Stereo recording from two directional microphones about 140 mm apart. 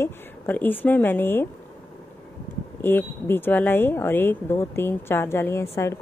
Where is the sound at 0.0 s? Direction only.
15° left (ahead or behind).